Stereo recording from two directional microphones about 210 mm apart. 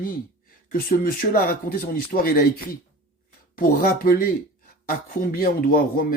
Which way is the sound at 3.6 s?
45° left (ahead or behind).